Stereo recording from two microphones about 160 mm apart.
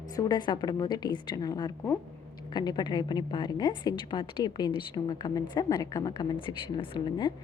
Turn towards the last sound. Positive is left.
turn(degrees=30)  # may be behind; listen again after turning